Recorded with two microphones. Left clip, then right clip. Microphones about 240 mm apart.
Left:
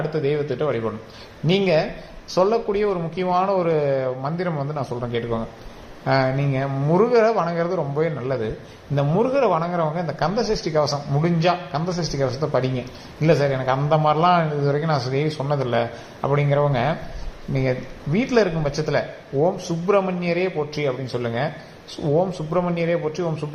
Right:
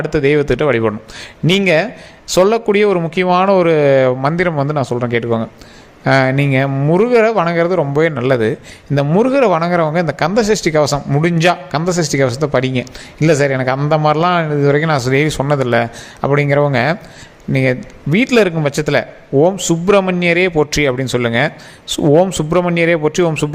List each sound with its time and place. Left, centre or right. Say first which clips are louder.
0.1 s speech: right 10 dB; right